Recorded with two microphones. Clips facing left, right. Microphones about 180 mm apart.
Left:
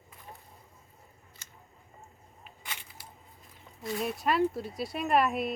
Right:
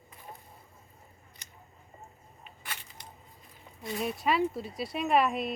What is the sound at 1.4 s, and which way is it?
Scissors, 20° right (ahead or behind).